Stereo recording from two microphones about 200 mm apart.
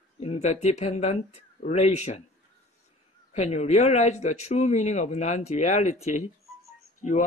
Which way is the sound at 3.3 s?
35° left (ahead or behind).